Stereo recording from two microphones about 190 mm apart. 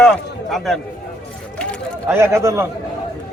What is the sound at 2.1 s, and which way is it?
Speech, 15° right (ahead or behind).